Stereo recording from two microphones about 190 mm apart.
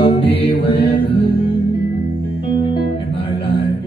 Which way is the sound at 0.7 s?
30° left (ahead or behind).